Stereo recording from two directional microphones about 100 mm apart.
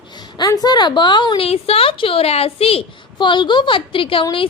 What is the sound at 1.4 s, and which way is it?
Speech, 75° left (ahead or behind).